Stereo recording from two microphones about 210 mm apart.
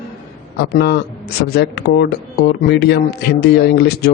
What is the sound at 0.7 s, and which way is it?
Speech, 50° left (ahead or behind).